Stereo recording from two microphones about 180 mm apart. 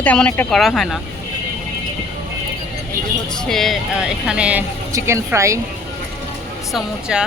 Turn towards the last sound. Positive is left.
turn(degrees=-5)  # may be behind; listen again after turning